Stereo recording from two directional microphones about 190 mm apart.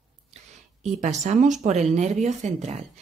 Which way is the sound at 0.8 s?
35° right (ahead or behind).